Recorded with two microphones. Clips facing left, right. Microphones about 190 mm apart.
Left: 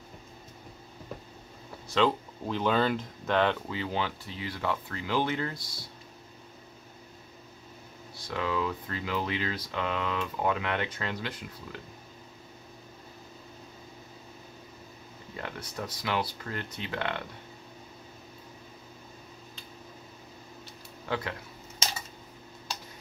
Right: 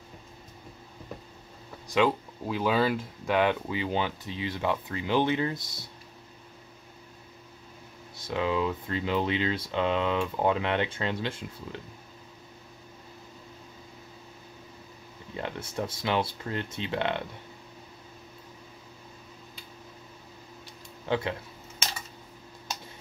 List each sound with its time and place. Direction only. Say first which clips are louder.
2.0 s speech: right 1 dB; 10° right (ahead or behind)
8.3 s speech: right 3 dB; 20° right (ahead or behind)
15.3 s speech: right 5 dB; 25° right (ahead or behind)
21.1 s speech: right 4 dB; 20° right (ahead or behind)